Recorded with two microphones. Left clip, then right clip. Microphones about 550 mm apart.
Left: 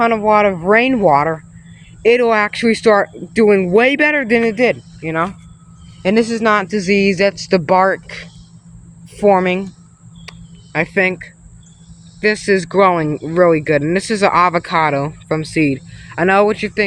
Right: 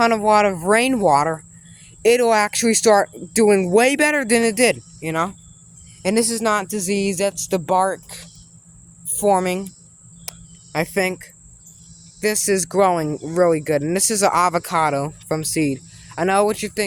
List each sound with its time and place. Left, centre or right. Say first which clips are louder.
0.0 s speech: left 3 dB; right
10.2 s cricket: left 1 dB; right
12.2 s speech: left 5 dB; right